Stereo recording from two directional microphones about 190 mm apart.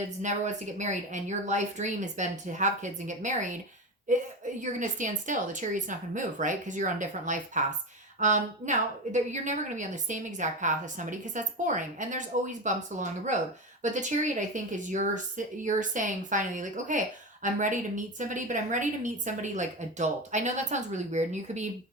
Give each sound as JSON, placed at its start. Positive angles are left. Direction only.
{"t": 0.2, "sound": "a woman's voice", "side_deg": -40}